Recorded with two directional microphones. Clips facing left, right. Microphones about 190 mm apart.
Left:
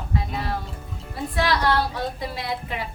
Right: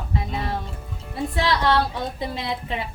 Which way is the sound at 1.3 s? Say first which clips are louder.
Right 1 dB; 20° right (ahead or behind).